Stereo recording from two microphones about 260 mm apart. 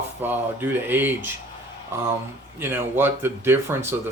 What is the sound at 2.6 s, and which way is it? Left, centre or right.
Speech, centre.